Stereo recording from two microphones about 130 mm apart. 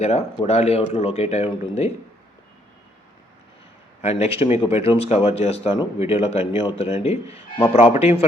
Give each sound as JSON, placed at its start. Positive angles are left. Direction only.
{"t": 0.0, "sound": "speech", "side_deg": 55}
{"t": 4.0, "sound": "speech", "side_deg": 50}